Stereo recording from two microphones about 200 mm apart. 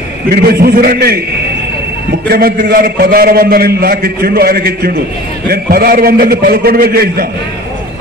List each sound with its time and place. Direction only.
0.3 s a man's voice: 50° right (ahead or behind)
2.2 s a man's voice: 50° right (ahead or behind)